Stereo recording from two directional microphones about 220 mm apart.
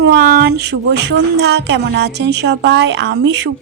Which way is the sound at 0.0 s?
45° right (ahead or behind).